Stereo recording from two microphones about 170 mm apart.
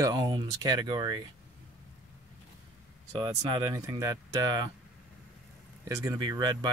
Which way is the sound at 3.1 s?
25° right (ahead or behind).